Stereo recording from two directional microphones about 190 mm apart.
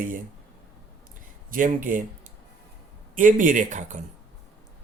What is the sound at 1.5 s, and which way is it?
Speech, 45° right (ahead or behind).